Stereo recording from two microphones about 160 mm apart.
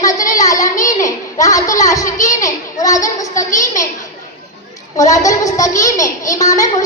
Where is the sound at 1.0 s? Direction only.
20° left (ahead or behind).